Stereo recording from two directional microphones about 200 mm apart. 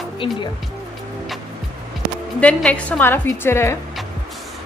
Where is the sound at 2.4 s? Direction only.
5° left (ahead or behind).